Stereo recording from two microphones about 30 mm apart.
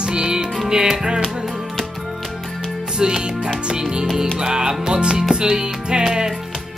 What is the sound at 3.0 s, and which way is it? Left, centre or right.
Music, right.